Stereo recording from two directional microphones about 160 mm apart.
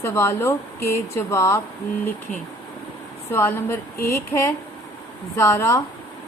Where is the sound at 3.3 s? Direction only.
15° left (ahead or behind).